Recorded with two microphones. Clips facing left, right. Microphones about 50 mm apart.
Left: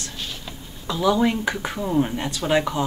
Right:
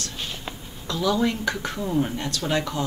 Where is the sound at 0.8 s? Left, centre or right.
Centre.